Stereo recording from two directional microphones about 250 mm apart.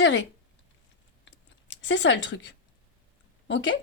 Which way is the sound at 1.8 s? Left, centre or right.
Left.